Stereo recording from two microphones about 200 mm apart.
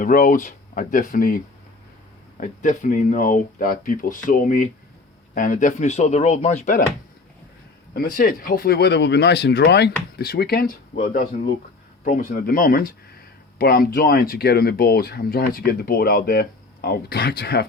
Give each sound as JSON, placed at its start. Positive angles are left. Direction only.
{"t": 0.0, "sound": "speech", "side_deg": 45}
{"t": 2.4, "sound": "speech", "side_deg": 40}
{"t": 7.9, "sound": "speech", "side_deg": 45}
{"t": 10.9, "sound": "speech", "side_deg": 35}